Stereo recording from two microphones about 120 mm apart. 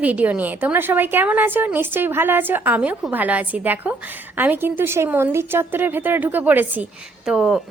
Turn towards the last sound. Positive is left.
turn(degrees=-5)  # may be behind; listen again after turning